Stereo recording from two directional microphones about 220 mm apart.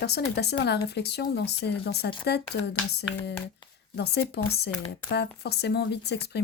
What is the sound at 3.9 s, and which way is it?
Speech, 50° left (ahead or behind).